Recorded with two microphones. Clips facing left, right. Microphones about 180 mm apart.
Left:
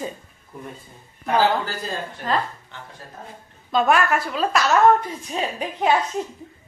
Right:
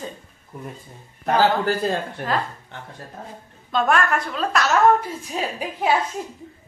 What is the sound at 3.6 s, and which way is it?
A woman's voice, centre (ahead or behind).